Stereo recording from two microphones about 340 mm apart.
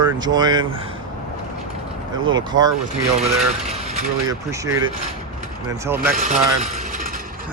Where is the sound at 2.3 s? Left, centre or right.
Centre.